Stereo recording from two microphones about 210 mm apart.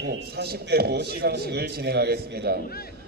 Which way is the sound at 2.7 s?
45° left (ahead or behind).